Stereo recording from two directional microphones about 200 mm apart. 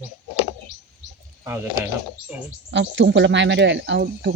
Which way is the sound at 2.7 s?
65° right (ahead or behind).